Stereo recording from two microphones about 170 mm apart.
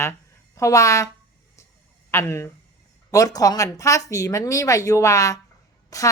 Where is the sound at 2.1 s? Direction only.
15° left (ahead or behind).